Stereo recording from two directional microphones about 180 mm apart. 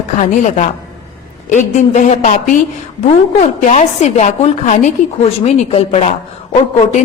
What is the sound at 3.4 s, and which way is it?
A woman's voice, 40° left (ahead or behind).